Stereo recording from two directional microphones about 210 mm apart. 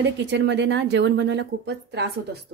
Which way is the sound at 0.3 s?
55° right (ahead or behind).